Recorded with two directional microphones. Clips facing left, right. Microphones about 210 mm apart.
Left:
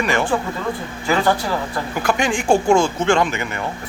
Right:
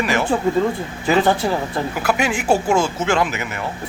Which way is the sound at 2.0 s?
5° right (ahead or behind).